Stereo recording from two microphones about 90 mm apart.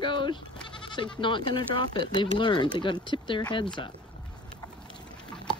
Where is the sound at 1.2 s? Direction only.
65° left (ahead or behind).